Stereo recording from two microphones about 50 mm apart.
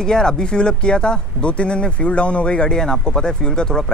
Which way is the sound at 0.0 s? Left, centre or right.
Centre.